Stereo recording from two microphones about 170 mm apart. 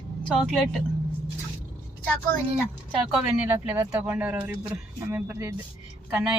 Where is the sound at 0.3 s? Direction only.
Centre (ahead or behind).